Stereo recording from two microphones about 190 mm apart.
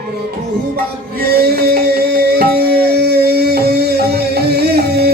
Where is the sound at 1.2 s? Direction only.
55° right (ahead or behind).